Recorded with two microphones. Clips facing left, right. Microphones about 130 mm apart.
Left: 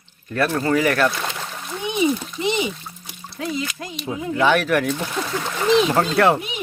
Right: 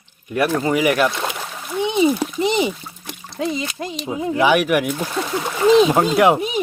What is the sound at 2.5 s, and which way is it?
Speech, 35° right (ahead or behind).